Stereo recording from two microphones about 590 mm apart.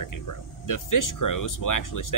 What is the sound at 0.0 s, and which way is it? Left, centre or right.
Speech, left.